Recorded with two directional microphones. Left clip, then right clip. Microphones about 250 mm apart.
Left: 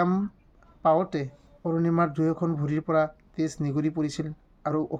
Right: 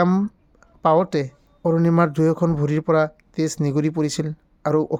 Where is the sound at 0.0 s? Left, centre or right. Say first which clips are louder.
Right 6 dB; right.